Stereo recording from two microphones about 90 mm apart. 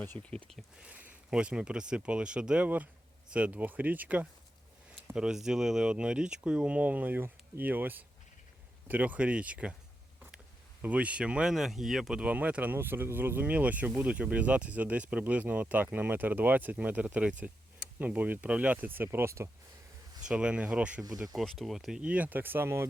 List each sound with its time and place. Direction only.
0.0 s speech: 15° left (ahead or behind)
0.8 s speech: 15° right (ahead or behind)
5.1 s speech: 5° right (ahead or behind)
10.8 s speech: 15° right (ahead or behind); by 19.5 s 30° right (ahead or behind)
20.2 s speech: 10° right (ahead or behind)
21.3 s speech: centre (ahead or behind); by 22.9 s 30° right (ahead or behind)